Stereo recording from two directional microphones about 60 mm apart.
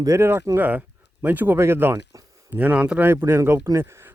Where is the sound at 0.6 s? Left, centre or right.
Right.